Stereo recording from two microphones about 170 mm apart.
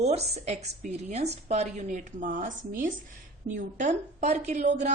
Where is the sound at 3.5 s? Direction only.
45° right (ahead or behind).